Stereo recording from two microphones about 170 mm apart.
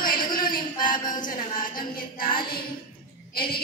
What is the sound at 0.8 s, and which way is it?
Speech, 25° left (ahead or behind).